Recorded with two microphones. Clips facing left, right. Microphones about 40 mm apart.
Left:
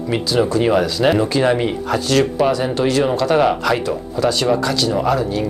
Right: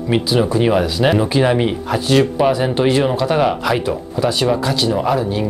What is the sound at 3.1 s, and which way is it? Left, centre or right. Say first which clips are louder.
Speech: left 1 dB; centre.